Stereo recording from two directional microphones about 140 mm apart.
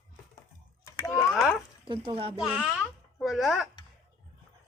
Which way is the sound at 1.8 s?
40° right (ahead or behind).